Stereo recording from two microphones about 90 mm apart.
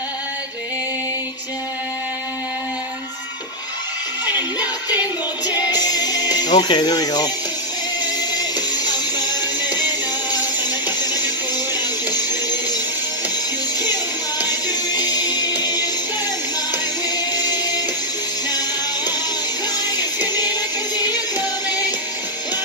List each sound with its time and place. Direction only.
5.7 s music: 50° left (ahead or behind)
8.5 s music: 50° left (ahead or behind)
14.4 s music: 50° left (ahead or behind)
17.3 s music: 50° left (ahead or behind)
21.6 s music: 45° left (ahead or behind)